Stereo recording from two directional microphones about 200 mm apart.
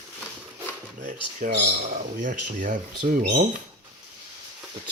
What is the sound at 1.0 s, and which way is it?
Speech, 40° right (ahead or behind).